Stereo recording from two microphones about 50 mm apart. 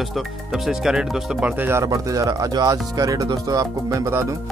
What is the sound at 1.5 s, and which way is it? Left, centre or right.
Speech, right.